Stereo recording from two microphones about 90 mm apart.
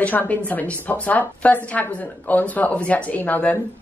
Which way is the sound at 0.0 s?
15° left (ahead or behind).